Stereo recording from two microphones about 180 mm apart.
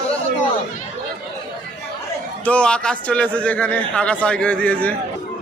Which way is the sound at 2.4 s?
5° left (ahead or behind).